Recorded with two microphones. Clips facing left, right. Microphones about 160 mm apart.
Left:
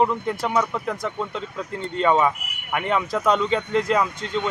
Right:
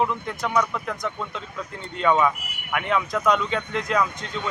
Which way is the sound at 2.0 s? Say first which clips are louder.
Left 1 dB; 25° left (ahead or behind).